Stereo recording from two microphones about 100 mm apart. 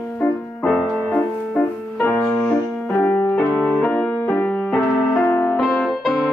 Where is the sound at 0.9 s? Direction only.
15° left (ahead or behind).